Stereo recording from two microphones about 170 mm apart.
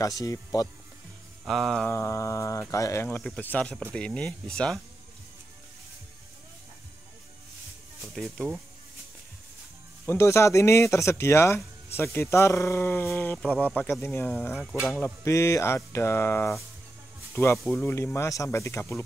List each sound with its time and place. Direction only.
0.0 s speech: 20° left (ahead or behind)
1.4 s speech: centre (ahead or behind)
1.9 s speech: 15° left (ahead or behind)
8.2 s speech: centre (ahead or behind)
10.0 s speech: 15° left (ahead or behind)
14.5 s speech: centre (ahead or behind)
15.0 s speech: 15° left (ahead or behind)
17.6 s speech: 5° left (ahead or behind)
17.9 s speech: 15° left (ahead or behind)